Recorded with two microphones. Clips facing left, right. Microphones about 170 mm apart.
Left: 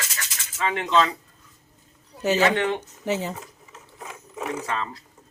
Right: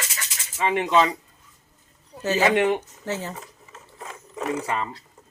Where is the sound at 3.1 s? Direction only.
15° left (ahead or behind).